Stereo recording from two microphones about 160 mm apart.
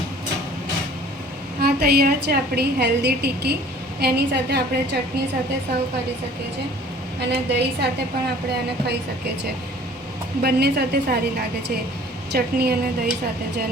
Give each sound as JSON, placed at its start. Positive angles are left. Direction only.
{"t": 1.6, "sound": "a woman's voice", "side_deg": -75}
{"t": 7.2, "sound": "a woman's voice", "side_deg": -90}
{"t": 10.4, "sound": "a woman's voice", "side_deg": -85}
{"t": 12.3, "sound": "a woman's voice", "side_deg": -80}